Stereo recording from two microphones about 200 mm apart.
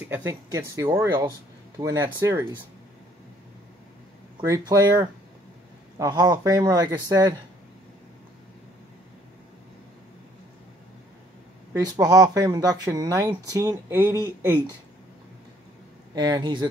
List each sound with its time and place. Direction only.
0.0 s speech: 10° right (ahead or behind)
4.4 s speech: 15° right (ahead or behind)
11.7 s speech: 20° right (ahead or behind)
16.2 s speech: 20° right (ahead or behind)